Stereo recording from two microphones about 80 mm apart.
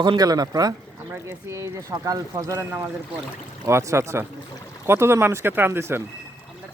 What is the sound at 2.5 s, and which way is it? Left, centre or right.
Speech, right.